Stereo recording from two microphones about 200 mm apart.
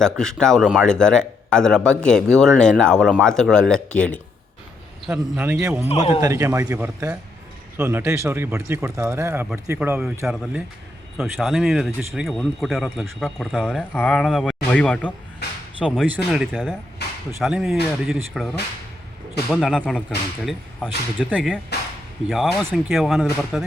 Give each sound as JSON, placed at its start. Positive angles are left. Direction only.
{"t": 0.0, "sound": "speech", "side_deg": 5}
{"t": 5.5, "sound": "speech", "side_deg": -15}
{"t": 15.4, "sound": "speech", "side_deg": 55}
{"t": 15.8, "sound": "speech", "side_deg": 5}
{"t": 16.0, "sound": "speech", "side_deg": -5}
{"t": 17.0, "sound": "a sound", "side_deg": 55}
{"t": 17.4, "sound": "speech", "side_deg": 0}